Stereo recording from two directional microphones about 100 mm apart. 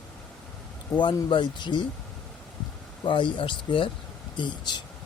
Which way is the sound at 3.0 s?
55° left (ahead or behind).